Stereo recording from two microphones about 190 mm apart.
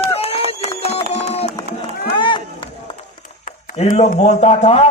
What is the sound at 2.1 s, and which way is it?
Run, 25° left (ahead or behind).